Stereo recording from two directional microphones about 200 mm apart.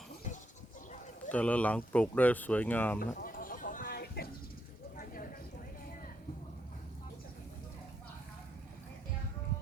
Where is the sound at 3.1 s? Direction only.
45° left (ahead or behind).